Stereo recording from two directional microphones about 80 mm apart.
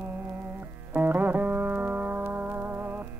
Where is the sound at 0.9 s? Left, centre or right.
Right.